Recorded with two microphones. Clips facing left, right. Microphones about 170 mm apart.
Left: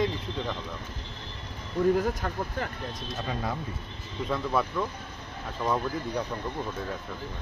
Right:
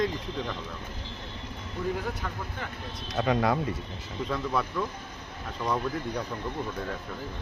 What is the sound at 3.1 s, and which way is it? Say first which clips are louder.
Speech: right 9 dB; 75° right (ahead or behind).